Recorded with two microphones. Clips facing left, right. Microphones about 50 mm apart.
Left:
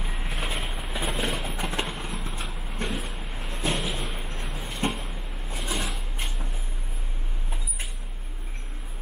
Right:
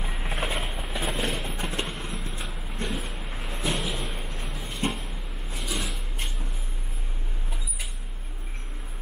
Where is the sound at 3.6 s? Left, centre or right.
Centre.